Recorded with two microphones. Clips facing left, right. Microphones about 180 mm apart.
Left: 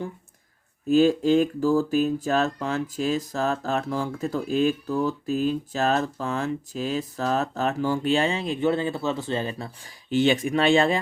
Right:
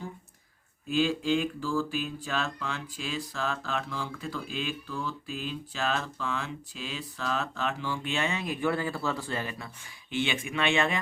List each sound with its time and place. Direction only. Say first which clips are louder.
0.9 s speech: left 8 dB; 40° left (ahead or behind)